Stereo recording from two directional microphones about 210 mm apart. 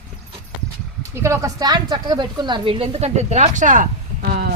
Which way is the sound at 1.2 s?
15° right (ahead or behind).